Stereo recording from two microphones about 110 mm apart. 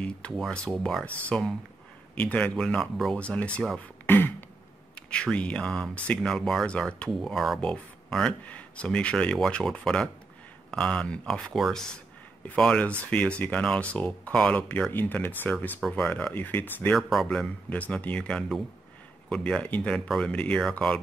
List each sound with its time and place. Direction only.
0.4 s speech: 5° left (ahead or behind)
4.1 s a sound: 20° left (ahead or behind)
4.9 s speech: 10° left (ahead or behind)
16.9 s speech: centre (ahead or behind)